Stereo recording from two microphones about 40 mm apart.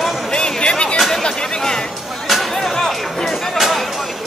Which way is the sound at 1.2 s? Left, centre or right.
Left.